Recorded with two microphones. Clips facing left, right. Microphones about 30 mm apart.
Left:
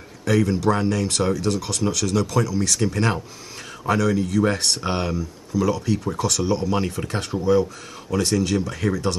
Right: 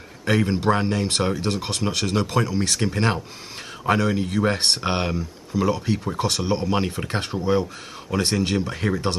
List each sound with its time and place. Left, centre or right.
0.2 s speech: right